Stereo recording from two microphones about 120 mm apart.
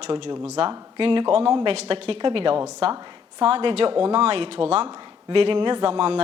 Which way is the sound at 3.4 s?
50° right (ahead or behind).